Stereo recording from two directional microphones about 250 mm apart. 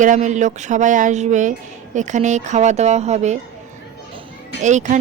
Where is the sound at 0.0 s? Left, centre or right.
Right.